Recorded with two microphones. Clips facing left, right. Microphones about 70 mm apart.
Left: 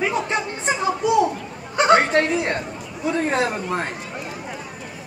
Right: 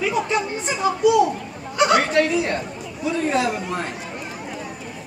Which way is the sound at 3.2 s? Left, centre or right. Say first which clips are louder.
Even; left.